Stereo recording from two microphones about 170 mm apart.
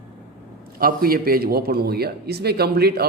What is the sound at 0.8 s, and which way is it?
A man's voice, 60° right (ahead or behind).